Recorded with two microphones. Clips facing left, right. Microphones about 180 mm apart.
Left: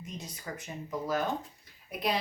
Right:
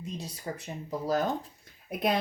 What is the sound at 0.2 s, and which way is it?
Speech, 30° right (ahead or behind).